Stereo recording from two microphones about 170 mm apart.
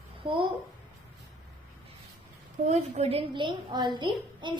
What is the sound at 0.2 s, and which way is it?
Speech, 30° right (ahead or behind).